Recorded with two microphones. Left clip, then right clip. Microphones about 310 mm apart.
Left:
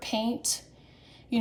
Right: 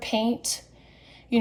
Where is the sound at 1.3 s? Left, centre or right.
Right.